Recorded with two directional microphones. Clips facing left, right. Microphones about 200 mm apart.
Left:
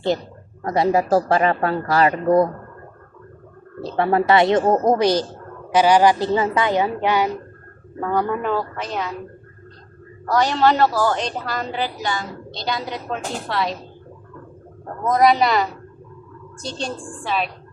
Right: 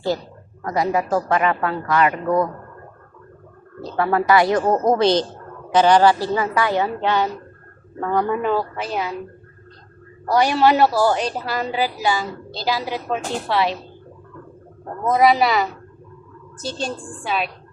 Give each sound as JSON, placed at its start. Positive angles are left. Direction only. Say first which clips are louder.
{"t": 0.6, "sound": "speech", "louder": "left 3 dB", "side_deg": 30}
{"t": 3.8, "sound": "a woman's voice", "louder": "left 1 dB", "side_deg": 25}
{"t": 10.2, "sound": "a woman's voice", "louder": "right 1 dB", "side_deg": -10}
{"t": 15.1, "sound": "a woman's voice", "louder": "even", "side_deg": -5}